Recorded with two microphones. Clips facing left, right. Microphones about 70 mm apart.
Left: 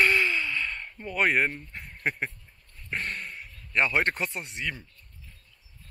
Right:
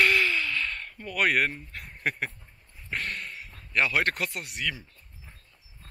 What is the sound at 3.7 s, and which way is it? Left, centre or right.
Speech, left.